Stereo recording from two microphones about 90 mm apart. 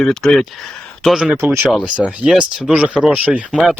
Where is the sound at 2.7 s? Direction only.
10° right (ahead or behind).